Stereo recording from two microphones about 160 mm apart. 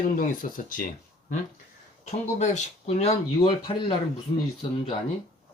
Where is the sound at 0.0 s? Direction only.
60° left (ahead or behind).